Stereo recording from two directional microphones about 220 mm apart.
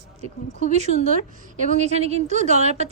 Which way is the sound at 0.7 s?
30° right (ahead or behind).